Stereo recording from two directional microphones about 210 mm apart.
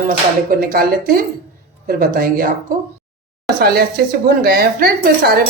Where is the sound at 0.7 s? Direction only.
45° right (ahead or behind).